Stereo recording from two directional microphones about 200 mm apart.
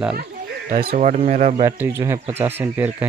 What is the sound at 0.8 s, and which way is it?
Speech, 40° right (ahead or behind).